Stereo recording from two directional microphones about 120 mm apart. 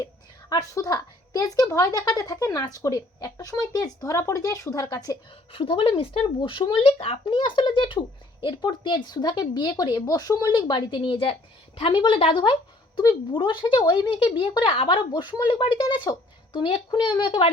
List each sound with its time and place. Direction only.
0.5 s speech: 30° left (ahead or behind)
5.5 s speech: 45° left (ahead or behind)